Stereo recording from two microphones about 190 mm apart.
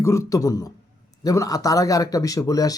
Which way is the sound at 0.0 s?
15° left (ahead or behind).